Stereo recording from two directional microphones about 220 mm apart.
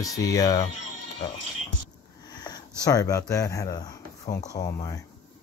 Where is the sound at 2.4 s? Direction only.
15° left (ahead or behind).